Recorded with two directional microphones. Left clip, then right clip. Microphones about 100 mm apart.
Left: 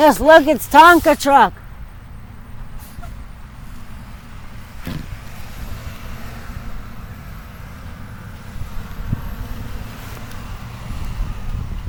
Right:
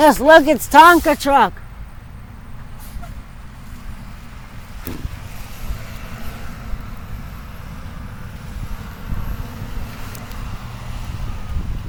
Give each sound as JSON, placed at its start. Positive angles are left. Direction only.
{"t": 0.0, "sound": "speech", "side_deg": 5}
{"t": 1.0, "sound": "speech", "side_deg": 25}
{"t": 5.6, "sound": "vehicle", "side_deg": 0}
{"t": 8.7, "sound": "vehicle", "side_deg": 10}